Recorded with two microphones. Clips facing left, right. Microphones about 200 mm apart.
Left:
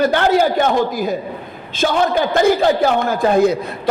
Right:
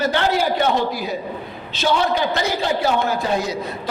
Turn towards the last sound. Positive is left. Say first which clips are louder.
# left 7 dB
turn(degrees=55)  # may be behind; listen again after turning